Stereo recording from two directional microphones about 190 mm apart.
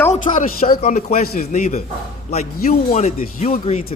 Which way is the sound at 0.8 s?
35° left (ahead or behind).